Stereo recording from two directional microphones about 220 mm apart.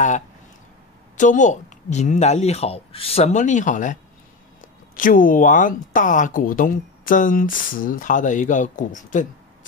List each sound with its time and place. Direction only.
1.1 s speech: 35° left (ahead or behind)